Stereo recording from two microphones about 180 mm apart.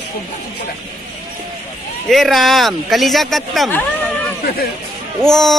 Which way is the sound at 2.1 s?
Centre (ahead or behind).